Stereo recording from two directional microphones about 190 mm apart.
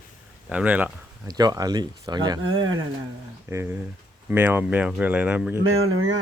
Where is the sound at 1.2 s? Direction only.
20° right (ahead or behind).